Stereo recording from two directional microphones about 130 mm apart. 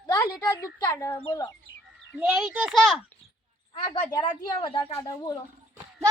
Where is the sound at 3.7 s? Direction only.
40° left (ahead or behind).